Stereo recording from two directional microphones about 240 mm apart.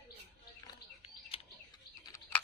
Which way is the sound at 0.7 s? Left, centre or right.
Left.